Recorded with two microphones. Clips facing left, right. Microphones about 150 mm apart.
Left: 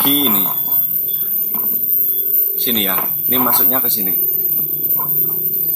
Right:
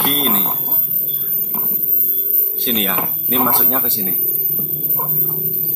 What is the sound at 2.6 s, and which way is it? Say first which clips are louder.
Speech: even; centre (ahead or behind).